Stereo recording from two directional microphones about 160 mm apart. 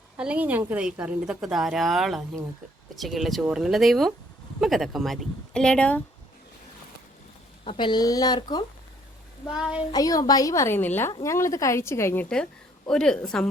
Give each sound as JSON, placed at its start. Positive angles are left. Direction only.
{"t": 0.2, "sound": "a woman's voice", "side_deg": -10}
{"t": 7.6, "sound": "a woman's voice", "side_deg": 30}
{"t": 9.5, "sound": "a woman's voice", "side_deg": -5}
{"t": 9.9, "sound": "a woman's voice", "side_deg": 25}